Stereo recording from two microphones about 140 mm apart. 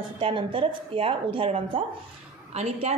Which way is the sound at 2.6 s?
50° right (ahead or behind).